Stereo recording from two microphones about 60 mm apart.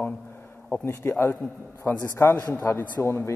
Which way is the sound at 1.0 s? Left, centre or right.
Left.